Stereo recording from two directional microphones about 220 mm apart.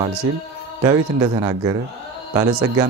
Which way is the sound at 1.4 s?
15° right (ahead or behind).